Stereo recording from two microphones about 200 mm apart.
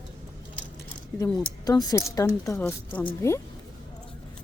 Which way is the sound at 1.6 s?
20° left (ahead or behind).